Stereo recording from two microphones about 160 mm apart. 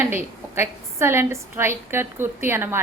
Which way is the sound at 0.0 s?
15° right (ahead or behind).